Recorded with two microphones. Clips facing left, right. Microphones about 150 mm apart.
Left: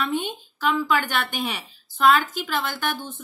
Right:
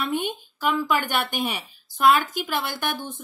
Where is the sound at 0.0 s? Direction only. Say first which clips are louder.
Even; 10° right (ahead or behind).